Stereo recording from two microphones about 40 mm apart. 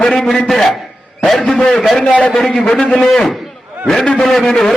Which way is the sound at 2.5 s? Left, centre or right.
Left.